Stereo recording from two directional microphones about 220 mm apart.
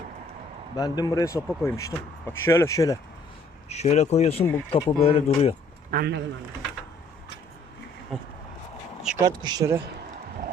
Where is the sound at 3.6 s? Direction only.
30° left (ahead or behind).